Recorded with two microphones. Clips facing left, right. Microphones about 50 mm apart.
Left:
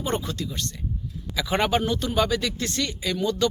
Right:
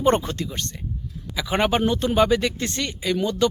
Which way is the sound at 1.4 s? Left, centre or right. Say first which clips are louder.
Right 1 dB; centre.